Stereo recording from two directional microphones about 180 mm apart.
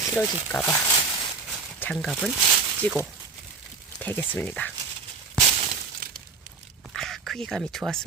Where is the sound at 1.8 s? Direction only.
5° left (ahead or behind).